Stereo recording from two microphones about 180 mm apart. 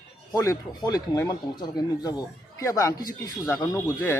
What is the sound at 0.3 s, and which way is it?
Speech, 20° left (ahead or behind).